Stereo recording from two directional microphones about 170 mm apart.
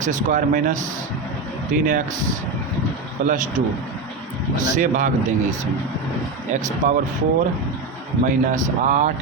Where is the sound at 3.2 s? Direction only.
50° right (ahead or behind).